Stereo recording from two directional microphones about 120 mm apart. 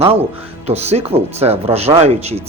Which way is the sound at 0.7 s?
60° right (ahead or behind).